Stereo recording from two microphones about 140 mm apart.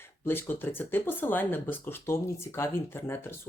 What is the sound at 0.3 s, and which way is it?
Speech, 15° left (ahead or behind).